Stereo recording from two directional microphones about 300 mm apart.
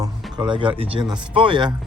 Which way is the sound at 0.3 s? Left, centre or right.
Centre.